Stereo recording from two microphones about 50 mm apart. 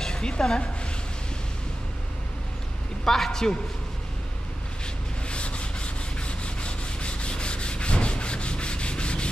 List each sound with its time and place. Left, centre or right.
0.0 s speech: centre
3.1 s a man's voice: centre
5.3 s sanding: left